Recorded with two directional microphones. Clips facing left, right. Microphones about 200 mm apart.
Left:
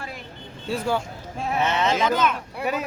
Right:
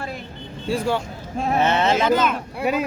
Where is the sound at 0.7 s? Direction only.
5° left (ahead or behind).